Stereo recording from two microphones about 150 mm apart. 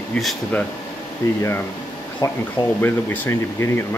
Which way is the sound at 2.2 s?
20° left (ahead or behind).